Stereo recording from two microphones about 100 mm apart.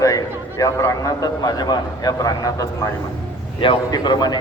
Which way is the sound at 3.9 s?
45° left (ahead or behind).